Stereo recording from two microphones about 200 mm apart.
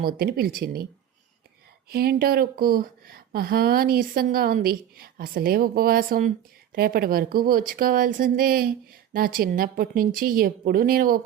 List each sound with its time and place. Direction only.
0.0 s speech: 50° right (ahead or behind)
1.9 s speech: 50° right (ahead or behind)